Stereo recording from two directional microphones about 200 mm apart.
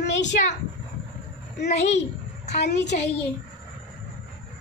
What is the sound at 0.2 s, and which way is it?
Speech, 35° left (ahead or behind).